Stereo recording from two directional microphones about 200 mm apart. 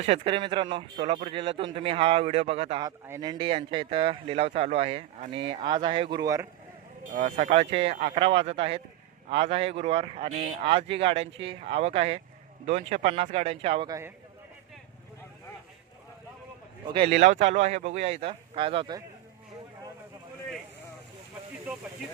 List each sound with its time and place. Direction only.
0.0 s speech: 30° right (ahead or behind)
2.8 s speech: 20° right (ahead or behind)
7.0 s speech: 40° right (ahead or behind); by 14.1 s 20° right (ahead or behind)
16.8 s speech: 25° right (ahead or behind)
21.7 s speech: 10° right (ahead or behind)